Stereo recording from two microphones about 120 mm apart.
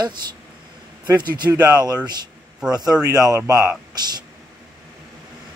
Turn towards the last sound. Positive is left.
turn(degrees=-30)  # may be behind; listen again after turning